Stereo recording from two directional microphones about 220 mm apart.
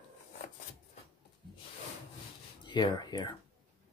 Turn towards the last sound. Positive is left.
turn(degrees=20)  # may be behind; listen again after turning